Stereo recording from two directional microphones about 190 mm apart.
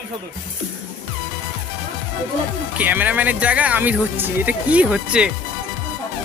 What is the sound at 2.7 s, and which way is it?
Speech, 10° right (ahead or behind).